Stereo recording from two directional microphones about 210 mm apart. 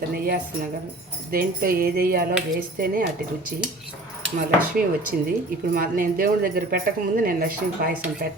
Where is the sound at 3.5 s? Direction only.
45° right (ahead or behind).